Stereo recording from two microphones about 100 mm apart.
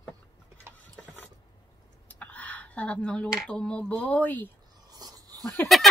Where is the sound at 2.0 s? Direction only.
15° left (ahead or behind).